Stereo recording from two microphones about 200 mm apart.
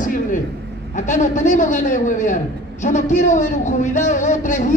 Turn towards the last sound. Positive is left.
turn(degrees=40)  # may be behind; listen again after turning